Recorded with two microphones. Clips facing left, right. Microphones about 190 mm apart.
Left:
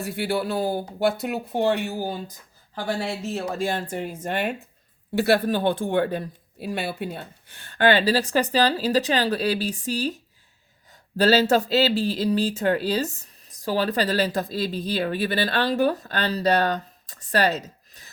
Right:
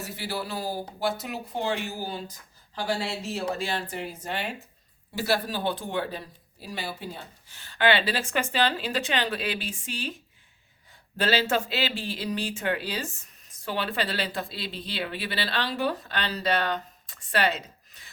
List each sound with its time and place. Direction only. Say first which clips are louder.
0.1 s speech: left 10 dB; 65° left (ahead or behind); by 10.2 s 40° left (ahead or behind)
11.2 s speech: left 7 dB; 40° left (ahead or behind)